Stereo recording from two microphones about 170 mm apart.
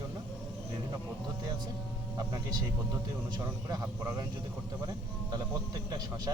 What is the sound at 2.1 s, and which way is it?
Speech, 20° right (ahead or behind).